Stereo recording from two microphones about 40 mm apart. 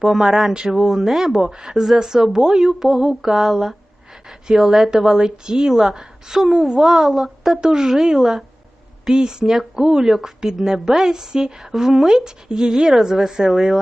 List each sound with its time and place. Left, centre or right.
0.1 s a woman's voice: centre